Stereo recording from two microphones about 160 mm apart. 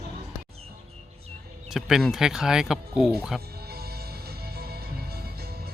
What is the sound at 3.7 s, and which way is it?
Music, 80° right.